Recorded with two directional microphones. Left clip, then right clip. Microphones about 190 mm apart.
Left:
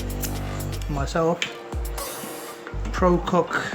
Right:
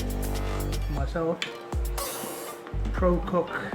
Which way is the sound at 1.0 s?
55° left (ahead or behind).